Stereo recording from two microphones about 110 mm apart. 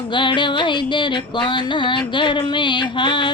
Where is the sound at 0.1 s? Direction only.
45° left (ahead or behind).